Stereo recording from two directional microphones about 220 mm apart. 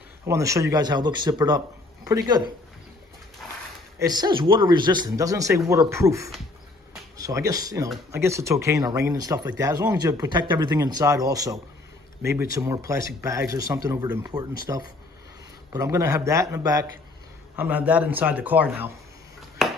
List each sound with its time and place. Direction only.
0.2 s speech: 15° right (ahead or behind)
4.0 s speech: 20° right (ahead or behind)
19.6 s a sound: centre (ahead or behind)